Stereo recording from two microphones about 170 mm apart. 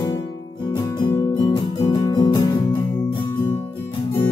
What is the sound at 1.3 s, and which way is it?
Music, 30° left (ahead or behind).